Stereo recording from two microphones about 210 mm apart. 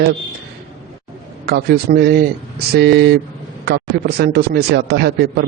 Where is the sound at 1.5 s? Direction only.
50° right (ahead or behind).